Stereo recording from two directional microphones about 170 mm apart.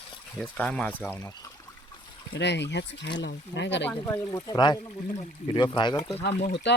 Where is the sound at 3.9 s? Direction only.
20° left (ahead or behind).